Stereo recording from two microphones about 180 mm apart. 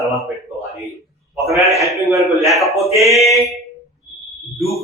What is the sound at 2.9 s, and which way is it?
Speech, 15° right (ahead or behind).